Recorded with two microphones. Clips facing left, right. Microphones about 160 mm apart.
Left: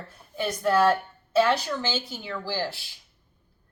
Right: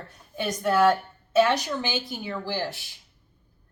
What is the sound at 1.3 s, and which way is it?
Speech, 15° right (ahead or behind).